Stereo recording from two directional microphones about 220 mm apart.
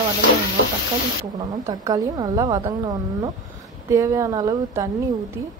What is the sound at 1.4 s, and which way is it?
A woman's voice, 20° right (ahead or behind).